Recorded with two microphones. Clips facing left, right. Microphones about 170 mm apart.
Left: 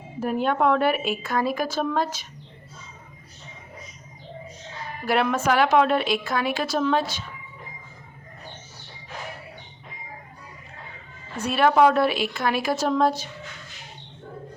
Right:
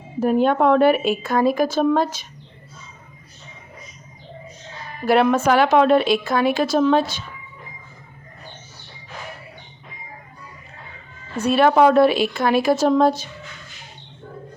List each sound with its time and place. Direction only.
0.2 s a woman's voice: 25° right (ahead or behind)
5.0 s a woman's voice: 30° right (ahead or behind)
11.3 s a woman's voice: 25° right (ahead or behind)